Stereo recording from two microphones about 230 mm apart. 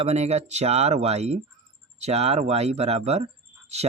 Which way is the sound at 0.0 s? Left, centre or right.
Right.